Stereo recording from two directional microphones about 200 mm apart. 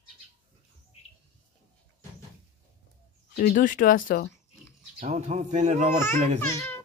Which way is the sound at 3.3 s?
45° left (ahead or behind).